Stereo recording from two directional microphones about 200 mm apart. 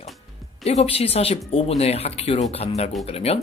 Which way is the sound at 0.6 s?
35° left (ahead or behind).